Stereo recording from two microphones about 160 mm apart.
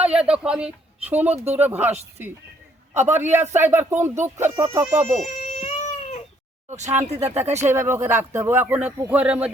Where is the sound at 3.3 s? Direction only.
45° right (ahead or behind).